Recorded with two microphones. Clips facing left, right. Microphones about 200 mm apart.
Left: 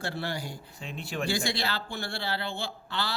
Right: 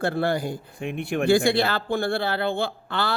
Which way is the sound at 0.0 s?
50° right (ahead or behind).